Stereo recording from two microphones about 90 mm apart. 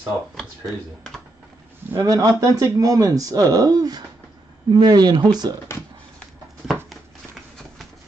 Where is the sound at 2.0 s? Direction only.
40° right (ahead or behind).